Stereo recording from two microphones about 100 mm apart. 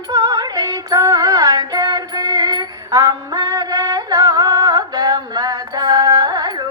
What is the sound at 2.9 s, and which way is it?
Music, 35° right (ahead or behind).